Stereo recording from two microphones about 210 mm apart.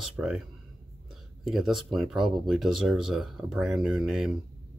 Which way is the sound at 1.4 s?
Centre (ahead or behind).